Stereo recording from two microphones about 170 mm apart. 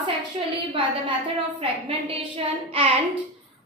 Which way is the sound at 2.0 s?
35° right (ahead or behind).